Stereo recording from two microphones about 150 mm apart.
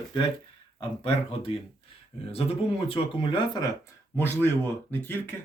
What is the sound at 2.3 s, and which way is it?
Speech, 40° left (ahead or behind).